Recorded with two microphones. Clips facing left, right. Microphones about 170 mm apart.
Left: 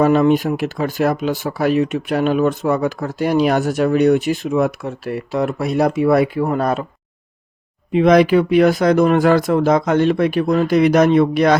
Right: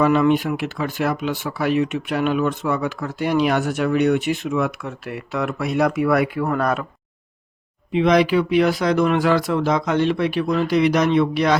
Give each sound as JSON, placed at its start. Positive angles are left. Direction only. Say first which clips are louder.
{"t": 0.0, "sound": "speech", "louder": "left 3 dB", "side_deg": 40}
{"t": 7.9, "sound": "speech", "louder": "left 4 dB", "side_deg": 50}